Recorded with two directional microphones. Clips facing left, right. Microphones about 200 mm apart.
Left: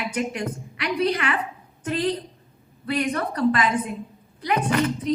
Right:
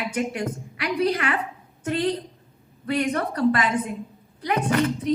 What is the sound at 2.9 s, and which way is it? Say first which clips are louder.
Speech: right 1 dB; 55° right (ahead or behind).